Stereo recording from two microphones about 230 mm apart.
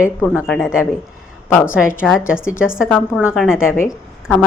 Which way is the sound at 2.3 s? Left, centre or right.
Centre.